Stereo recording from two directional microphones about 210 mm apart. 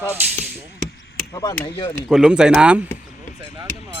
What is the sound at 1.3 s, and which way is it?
Speech, 15° left (ahead or behind).